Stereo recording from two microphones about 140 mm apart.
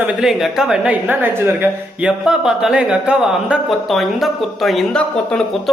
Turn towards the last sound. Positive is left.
turn(degrees=5)  # may be behind; listen again after turning